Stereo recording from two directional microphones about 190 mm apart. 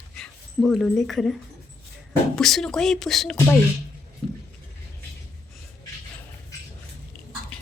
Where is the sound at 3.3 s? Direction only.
10° left (ahead or behind).